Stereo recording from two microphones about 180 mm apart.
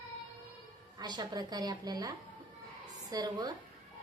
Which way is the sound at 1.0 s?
25° right (ahead or behind).